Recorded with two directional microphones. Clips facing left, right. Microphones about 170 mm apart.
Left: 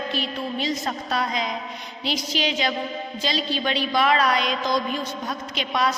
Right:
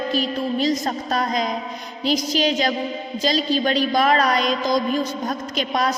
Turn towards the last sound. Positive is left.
turn(degrees=-45)  # may be behind; listen again after turning